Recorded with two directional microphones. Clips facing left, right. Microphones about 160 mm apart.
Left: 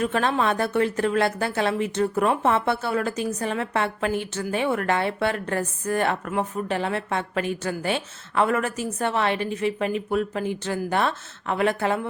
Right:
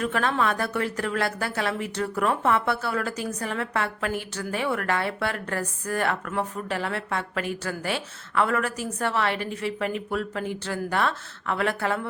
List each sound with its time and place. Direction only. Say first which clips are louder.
0.0 s a woman's voice: left 2 dB; 25° left (ahead or behind)